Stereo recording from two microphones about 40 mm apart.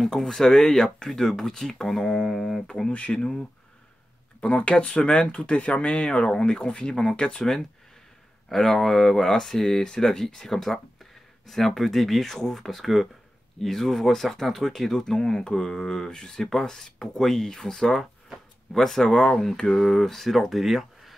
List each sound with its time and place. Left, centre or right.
0.0 s speech: centre
4.4 s speech: left; by 21.1 s centre